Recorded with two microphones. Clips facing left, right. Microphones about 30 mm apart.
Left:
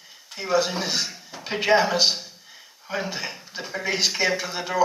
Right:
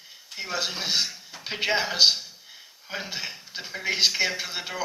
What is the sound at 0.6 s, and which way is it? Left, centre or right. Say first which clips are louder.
Speech: left 1 dB; centre.